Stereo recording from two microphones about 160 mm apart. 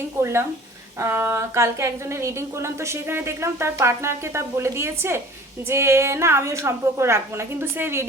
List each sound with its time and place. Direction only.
0.2 s a woman's voice: 15° right (ahead or behind)